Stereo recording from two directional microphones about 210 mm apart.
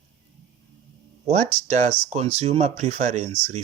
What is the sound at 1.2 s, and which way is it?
Speech, 30° right (ahead or behind).